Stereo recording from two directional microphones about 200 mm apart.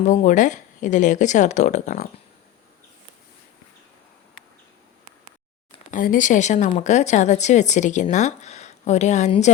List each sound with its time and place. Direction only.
0.0 s a woman's voice: 40° left (ahead or behind)
5.9 s a woman's voice: 40° left (ahead or behind)